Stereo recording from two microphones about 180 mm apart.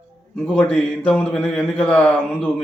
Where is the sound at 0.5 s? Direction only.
5° left (ahead or behind).